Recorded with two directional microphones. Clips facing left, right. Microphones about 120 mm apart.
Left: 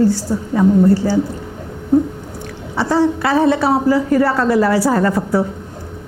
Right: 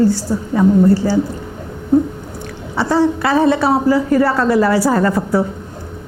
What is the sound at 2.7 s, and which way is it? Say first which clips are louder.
A woman's voice: right 1 dB; 25° right (ahead or behind).